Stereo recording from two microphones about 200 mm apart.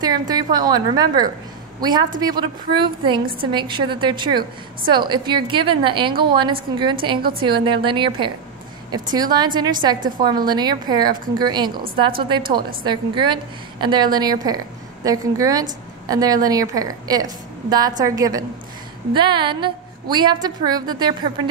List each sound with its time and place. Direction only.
0.3 s a woman's voice: 20° right (ahead or behind)